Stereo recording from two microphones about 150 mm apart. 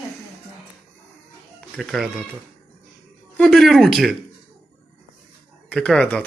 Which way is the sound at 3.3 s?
5° left (ahead or behind).